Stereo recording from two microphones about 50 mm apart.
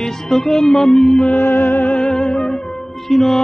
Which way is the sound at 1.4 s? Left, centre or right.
Left.